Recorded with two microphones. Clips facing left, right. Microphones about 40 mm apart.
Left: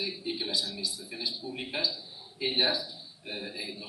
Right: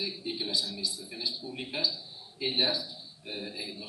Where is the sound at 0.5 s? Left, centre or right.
Left.